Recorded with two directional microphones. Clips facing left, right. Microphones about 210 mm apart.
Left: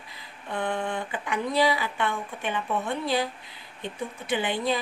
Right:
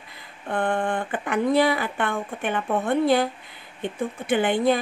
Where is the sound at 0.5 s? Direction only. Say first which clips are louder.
Right 5 dB; 50° right (ahead or behind).